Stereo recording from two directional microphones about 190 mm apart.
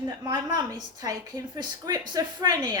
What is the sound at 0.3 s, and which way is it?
A woman's voice, 20° right (ahead or behind).